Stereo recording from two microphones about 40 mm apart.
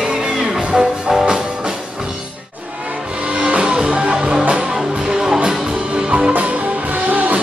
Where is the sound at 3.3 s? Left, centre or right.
Right.